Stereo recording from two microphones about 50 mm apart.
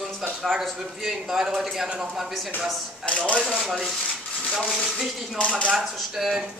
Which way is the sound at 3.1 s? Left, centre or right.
Left.